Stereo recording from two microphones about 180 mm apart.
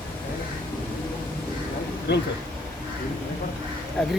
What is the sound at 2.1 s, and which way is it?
Speech, 70° left (ahead or behind).